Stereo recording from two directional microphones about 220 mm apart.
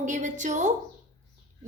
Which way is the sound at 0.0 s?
35° right (ahead or behind).